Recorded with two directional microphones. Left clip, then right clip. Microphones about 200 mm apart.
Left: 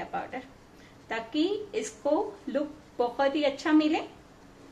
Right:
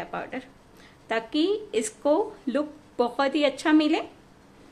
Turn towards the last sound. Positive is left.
turn(degrees=-55)  # may be behind; listen again after turning